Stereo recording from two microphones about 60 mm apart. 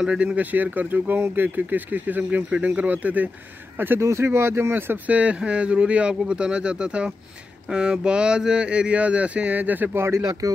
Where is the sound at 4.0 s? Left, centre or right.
Right.